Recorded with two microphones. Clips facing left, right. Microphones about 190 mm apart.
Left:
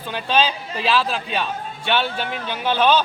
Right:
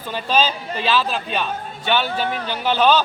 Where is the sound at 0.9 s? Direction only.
Centre (ahead or behind).